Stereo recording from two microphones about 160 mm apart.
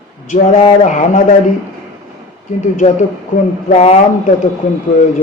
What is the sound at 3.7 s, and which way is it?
Speech, 45° left (ahead or behind).